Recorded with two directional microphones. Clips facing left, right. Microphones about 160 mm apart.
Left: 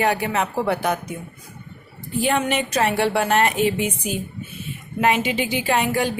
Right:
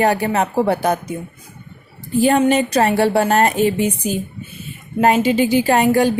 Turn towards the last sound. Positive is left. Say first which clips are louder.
# right 7 dB
turn(degrees=-40)  # may be behind; listen again after turning